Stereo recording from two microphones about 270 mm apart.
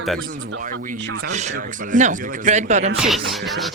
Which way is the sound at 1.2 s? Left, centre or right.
Right.